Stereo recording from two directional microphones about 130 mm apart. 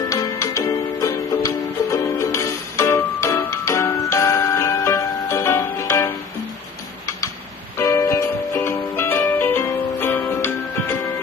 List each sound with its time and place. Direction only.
0.1 s music: 25° left (ahead or behind)
7.8 s music: 20° left (ahead or behind)